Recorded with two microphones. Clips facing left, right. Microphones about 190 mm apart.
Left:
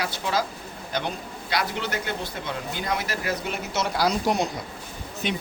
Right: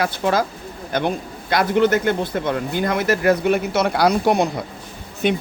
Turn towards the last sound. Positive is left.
turn(degrees=-55)  # may be behind; listen again after turning